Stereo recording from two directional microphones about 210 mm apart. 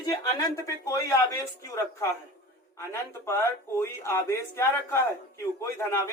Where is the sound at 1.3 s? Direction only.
15° left (ahead or behind).